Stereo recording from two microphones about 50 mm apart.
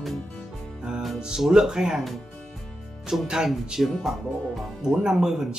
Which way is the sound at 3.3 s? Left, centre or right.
Centre.